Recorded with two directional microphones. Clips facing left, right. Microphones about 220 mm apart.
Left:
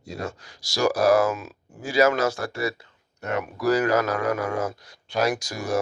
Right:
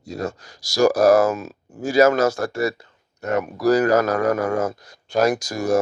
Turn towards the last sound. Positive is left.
turn(degrees=-45)  # may be behind; listen again after turning